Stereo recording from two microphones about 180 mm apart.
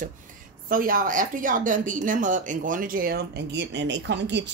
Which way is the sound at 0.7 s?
50° right (ahead or behind).